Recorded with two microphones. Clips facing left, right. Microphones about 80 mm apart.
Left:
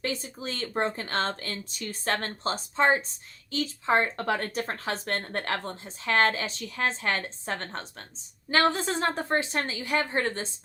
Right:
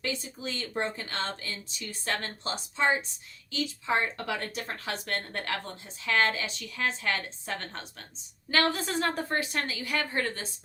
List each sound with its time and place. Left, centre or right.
0.0 s a woman's voice: left